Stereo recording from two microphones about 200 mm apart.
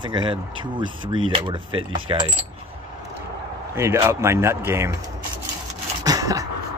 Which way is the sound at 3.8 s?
10° right (ahead or behind).